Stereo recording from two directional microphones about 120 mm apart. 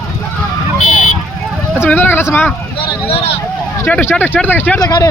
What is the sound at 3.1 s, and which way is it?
Speech, 55° left (ahead or behind).